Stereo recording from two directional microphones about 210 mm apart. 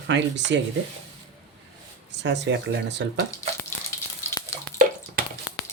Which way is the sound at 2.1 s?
55° right (ahead or behind).